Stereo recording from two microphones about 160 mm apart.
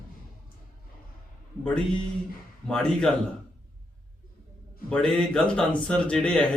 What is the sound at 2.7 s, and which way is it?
Speech, 5° left (ahead or behind).